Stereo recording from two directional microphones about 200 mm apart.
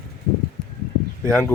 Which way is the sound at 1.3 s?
5° left (ahead or behind).